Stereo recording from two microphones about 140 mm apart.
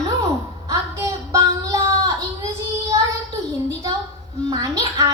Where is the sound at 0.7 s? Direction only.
25° right (ahead or behind).